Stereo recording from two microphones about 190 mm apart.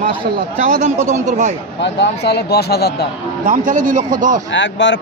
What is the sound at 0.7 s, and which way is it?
Speech, 45° right (ahead or behind).